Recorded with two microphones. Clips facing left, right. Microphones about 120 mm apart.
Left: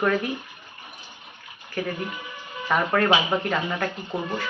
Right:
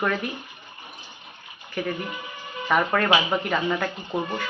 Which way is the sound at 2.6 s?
Centre (ahead or behind).